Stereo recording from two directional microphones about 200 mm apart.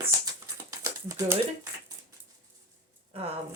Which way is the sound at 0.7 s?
15° right (ahead or behind).